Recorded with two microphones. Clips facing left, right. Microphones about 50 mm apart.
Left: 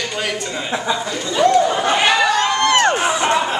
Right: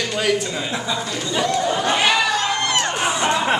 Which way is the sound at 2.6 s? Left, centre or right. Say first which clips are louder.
Left 7 dB; left.